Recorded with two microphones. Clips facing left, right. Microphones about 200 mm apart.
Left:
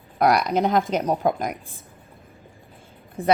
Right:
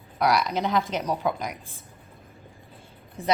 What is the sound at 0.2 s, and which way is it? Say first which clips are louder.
Speech: left 4 dB; 50° left (ahead or behind).